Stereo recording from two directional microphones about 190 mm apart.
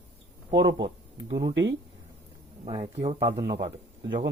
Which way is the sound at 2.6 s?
30° right (ahead or behind).